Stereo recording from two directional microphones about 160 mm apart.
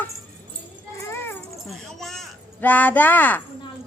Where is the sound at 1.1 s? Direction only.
15° left (ahead or behind).